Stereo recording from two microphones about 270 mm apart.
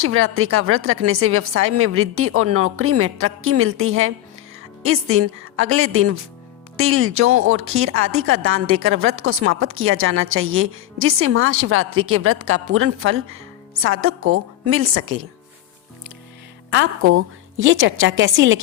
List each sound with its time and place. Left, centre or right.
0.0 s speech: right
16.6 s speech: right